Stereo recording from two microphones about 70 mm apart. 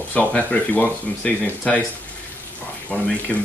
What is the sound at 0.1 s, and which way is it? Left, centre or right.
Speech, left.